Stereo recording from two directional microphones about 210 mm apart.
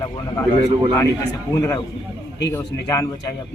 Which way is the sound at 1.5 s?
15° left (ahead or behind).